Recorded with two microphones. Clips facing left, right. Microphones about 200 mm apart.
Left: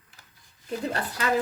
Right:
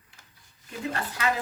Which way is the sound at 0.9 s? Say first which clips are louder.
Right 2 dB; 35° left (ahead or behind).